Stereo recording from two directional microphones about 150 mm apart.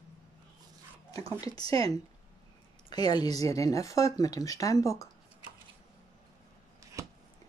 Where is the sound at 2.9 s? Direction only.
30° left (ahead or behind).